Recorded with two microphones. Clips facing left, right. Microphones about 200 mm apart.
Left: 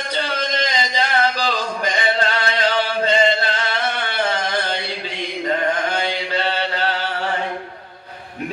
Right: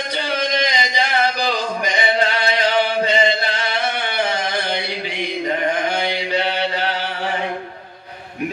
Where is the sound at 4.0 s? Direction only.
15° right (ahead or behind).